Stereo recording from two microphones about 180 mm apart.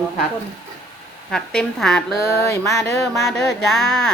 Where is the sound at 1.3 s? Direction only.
5° left (ahead or behind).